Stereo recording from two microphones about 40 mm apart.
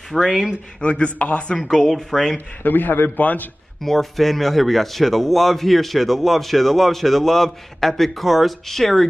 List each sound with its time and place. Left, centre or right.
0.1 s speech: centre
0.7 s speech: left
1.6 s speech: centre
2.6 s a man's voice: left
3.2 s a man's voice: left
3.8 s speech: centre